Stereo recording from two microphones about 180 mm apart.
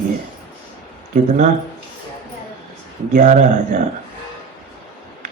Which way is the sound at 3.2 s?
40° right (ahead or behind).